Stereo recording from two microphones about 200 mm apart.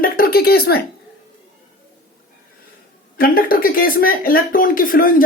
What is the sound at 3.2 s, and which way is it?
Speech, 45° left (ahead or behind).